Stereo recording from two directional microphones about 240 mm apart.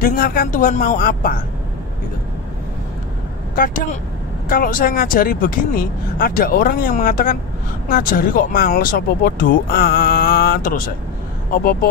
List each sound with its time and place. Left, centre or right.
0.0 s speech: left
3.5 s speech: left